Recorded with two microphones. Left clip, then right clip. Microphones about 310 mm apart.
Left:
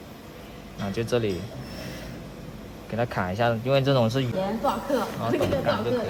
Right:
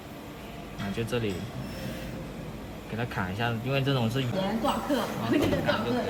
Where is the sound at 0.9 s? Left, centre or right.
Left.